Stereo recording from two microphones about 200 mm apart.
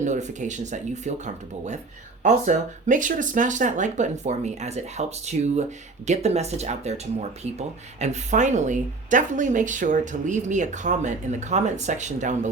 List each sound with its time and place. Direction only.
0.0 s a woman's voice: 35° right (ahead or behind)